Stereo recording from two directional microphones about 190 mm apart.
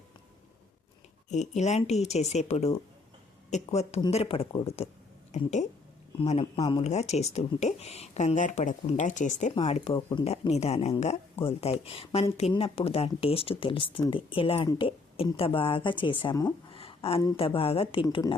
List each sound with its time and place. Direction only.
1.3 s a woman's voice: 35° left (ahead or behind); by 6.8 s 20° left (ahead or behind)
6.8 s a woman's voice: 35° left (ahead or behind)